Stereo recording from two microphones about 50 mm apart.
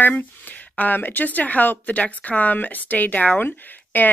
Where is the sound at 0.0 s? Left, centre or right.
Left.